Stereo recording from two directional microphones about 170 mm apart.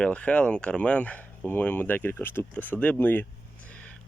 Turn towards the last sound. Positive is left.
turn(degrees=10)  # may be behind; listen again after turning